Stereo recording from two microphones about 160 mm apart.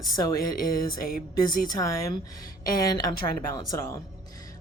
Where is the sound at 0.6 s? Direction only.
65° left (ahead or behind).